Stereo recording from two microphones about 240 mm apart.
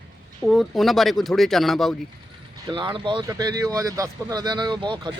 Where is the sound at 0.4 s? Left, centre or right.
Centre.